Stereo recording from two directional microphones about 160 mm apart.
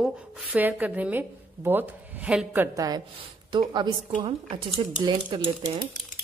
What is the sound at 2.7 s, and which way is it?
A woman's voice, 25° right (ahead or behind).